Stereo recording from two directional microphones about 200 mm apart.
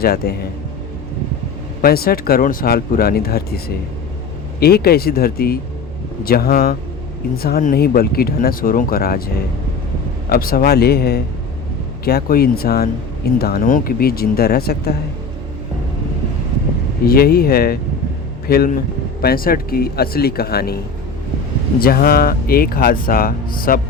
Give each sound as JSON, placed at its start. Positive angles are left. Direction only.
{"t": 0.0, "sound": "speech", "side_deg": 50}
{"t": 1.8, "sound": "speech", "side_deg": 50}
{"t": 4.6, "sound": "speech", "side_deg": 50}
{"t": 17.1, "sound": "speech", "side_deg": 50}
{"t": 21.8, "sound": "speech", "side_deg": 50}